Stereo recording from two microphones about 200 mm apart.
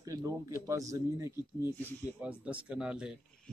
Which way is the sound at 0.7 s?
15° right (ahead or behind).